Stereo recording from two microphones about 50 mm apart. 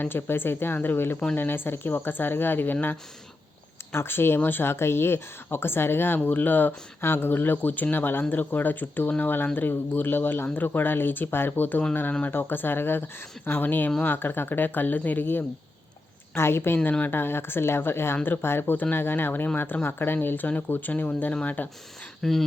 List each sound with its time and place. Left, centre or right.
0.0 s speech: left
3.9 s speech: left
6.1 s speech: left
20.9 s speech: left
22.2 s speech: centre